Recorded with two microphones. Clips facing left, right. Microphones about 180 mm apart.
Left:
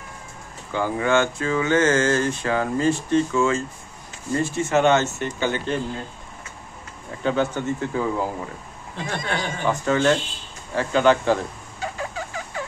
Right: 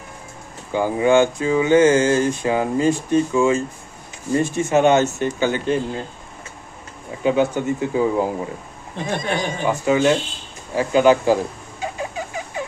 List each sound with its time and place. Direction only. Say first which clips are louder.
0.7 s speech: right 5 dB; 15° right (ahead or behind)
7.2 s speech: right 4 dB; 10° right (ahead or behind)
11.8 s a sound: right 3 dB; 20° right (ahead or behind)